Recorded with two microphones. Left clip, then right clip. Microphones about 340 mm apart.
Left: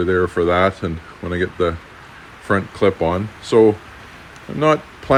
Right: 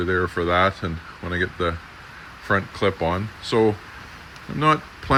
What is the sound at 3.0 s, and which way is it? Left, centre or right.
Speech, left.